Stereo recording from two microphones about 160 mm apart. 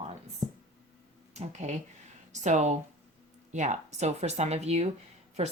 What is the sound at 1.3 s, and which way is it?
Speech, 45° right (ahead or behind).